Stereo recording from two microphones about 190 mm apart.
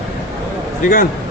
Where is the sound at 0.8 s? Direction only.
45° left (ahead or behind).